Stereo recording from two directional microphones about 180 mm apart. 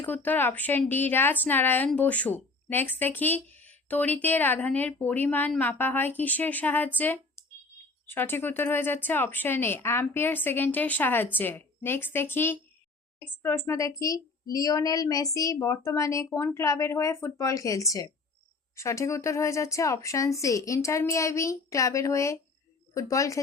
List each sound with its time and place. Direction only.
0.0 s a woman's voice: 10° left (ahead or behind)